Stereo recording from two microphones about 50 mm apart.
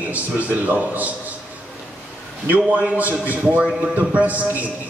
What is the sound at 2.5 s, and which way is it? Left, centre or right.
A man's voice, right.